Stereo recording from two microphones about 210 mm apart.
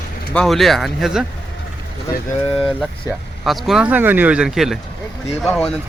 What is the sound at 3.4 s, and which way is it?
Speech, centre (ahead or behind).